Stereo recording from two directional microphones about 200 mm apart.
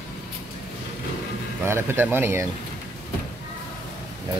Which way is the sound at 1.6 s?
10° right (ahead or behind).